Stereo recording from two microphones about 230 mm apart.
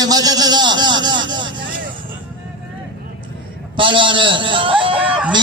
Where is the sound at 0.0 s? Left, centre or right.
Centre.